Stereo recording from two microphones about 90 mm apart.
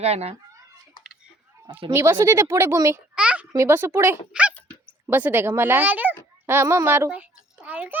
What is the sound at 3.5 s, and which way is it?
Speech, 30° right (ahead or behind).